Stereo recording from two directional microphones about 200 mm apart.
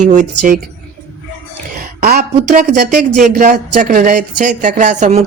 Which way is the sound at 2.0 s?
45° right (ahead or behind).